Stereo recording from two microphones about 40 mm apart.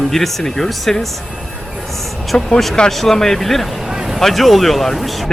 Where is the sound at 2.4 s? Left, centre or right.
Centre.